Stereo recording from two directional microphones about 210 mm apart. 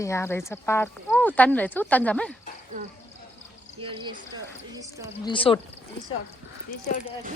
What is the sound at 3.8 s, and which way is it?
Speech, 25° right (ahead or behind).